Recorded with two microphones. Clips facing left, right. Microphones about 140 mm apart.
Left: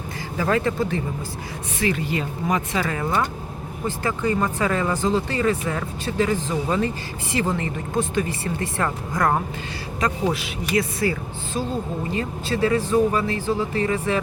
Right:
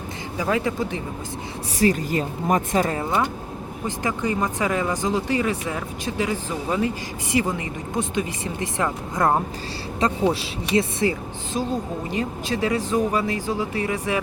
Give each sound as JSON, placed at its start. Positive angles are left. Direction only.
{"t": 0.3, "sound": "speech", "side_deg": -15}
{"t": 1.8, "sound": "speech", "side_deg": -40}
{"t": 3.0, "sound": "speech", "side_deg": -20}